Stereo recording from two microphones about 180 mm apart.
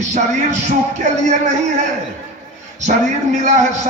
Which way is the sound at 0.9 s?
40° right (ahead or behind).